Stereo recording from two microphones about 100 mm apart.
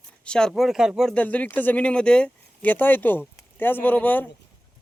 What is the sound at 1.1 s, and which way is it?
Speech, 15° left (ahead or behind).